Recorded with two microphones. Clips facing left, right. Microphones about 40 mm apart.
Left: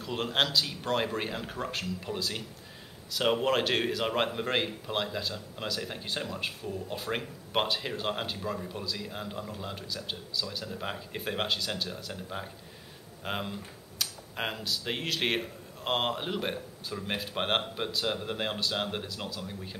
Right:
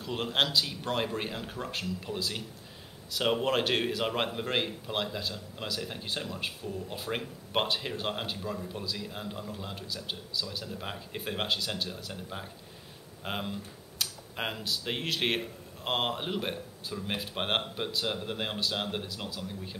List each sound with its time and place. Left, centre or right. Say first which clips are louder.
0.0 s a man's voice: even; centre
8.4 s speech: left 1 dB; centre
8.7 s a man's voice: left 1 dB; centre